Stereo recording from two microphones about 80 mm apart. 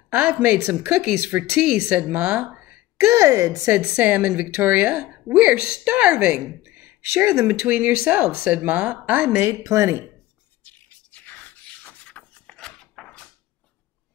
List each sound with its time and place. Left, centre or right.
0.1 s a woman's voice: centre
1.3 s speech: right
3.1 s a woman's voice: right
3.7 s a woman's voice: centre
6.6 s a sound: right
7.4 s a woman's voice: centre
9.4 s a woman's voice: right
10.6 s a sound: left